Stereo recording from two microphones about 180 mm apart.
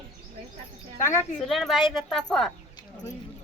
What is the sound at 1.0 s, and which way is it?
Speech, 15° left (ahead or behind).